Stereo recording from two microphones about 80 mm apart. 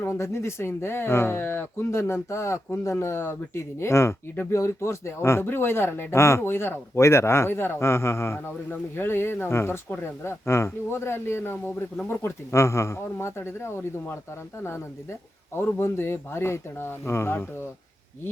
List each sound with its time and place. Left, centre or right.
0.1 s speech: left
15.5 s speech: left